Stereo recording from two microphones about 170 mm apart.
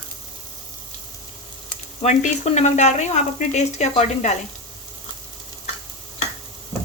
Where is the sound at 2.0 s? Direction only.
40° left (ahead or behind).